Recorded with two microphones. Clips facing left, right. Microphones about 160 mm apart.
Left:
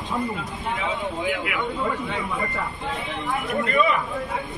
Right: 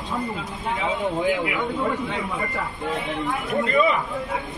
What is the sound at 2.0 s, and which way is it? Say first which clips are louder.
Speech: even; centre (ahead or behind).